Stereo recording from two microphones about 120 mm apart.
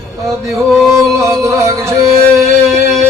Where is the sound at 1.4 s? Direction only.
25° right (ahead or behind).